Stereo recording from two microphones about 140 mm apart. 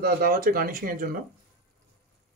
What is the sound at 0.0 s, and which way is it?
Speech, 85° right.